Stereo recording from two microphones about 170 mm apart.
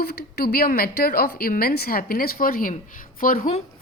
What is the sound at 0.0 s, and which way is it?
A woman's voice, 65° left (ahead or behind).